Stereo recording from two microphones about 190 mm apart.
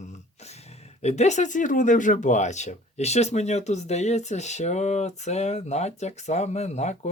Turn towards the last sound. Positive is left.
turn(degrees=35)  # may be behind; listen again after turning